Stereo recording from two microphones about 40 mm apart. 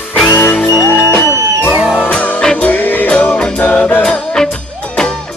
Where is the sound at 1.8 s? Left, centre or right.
Right.